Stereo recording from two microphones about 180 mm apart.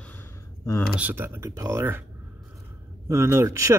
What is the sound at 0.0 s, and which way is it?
Gasp, 10° left (ahead or behind).